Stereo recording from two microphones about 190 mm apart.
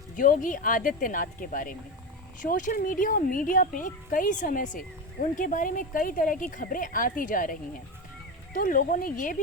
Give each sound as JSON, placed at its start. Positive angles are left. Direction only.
{"t": 0.2, "sound": "a woman's voice", "side_deg": 45}